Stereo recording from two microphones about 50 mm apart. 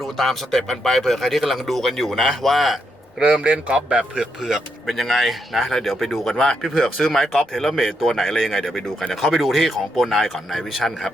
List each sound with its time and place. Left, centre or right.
0.0 s speech: centre
3.2 s a man's voice: right
4.9 s speech: centre